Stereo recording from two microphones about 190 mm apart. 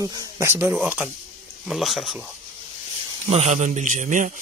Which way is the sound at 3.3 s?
35° right (ahead or behind).